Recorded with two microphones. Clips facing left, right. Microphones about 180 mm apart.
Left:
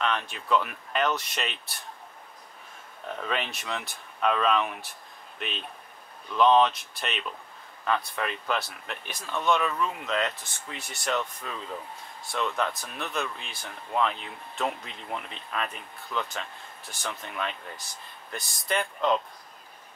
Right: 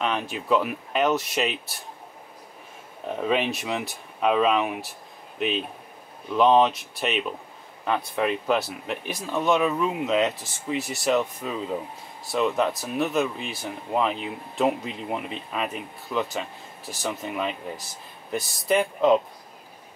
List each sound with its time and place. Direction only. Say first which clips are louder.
0.0 s speech: right 3 dB; 5° right (ahead or behind)
3.1 s speech: right 7 dB; 5° right (ahead or behind)